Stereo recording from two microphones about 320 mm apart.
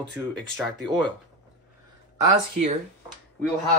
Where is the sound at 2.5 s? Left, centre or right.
Centre.